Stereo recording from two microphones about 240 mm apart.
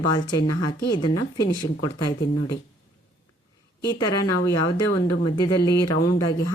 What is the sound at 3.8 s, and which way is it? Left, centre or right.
Speech, centre.